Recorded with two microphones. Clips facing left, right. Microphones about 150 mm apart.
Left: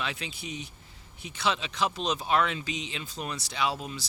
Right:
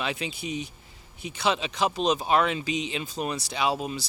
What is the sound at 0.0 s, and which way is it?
Speech, 10° right (ahead or behind).